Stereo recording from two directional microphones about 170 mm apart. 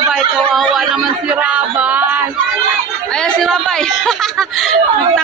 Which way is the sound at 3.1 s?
5° left (ahead or behind).